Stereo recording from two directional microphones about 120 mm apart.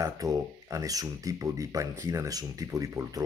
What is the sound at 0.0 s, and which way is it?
Speech, 30° right (ahead or behind).